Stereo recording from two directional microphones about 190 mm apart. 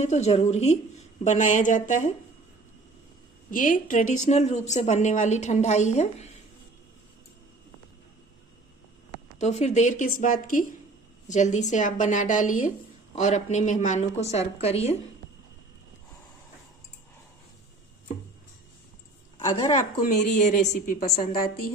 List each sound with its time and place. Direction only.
0.0 s a woman's voice: 35° left (ahead or behind)
3.4 s a woman's voice: 45° left (ahead or behind)
9.4 s a woman's voice: 35° left (ahead or behind)
19.3 s a woman's voice: 20° left (ahead or behind)
19.7 s a woman's voice: 40° left (ahead or behind)